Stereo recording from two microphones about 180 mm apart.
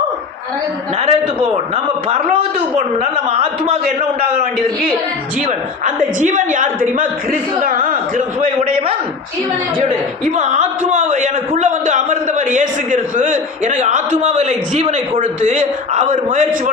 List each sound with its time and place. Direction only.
1.0 s a man's voice: 30° right (ahead or behind)
5.5 s a man's voice: 45° right (ahead or behind)
8.4 s a man's voice: 35° right (ahead or behind)
10.3 s a man's voice: 40° right (ahead or behind)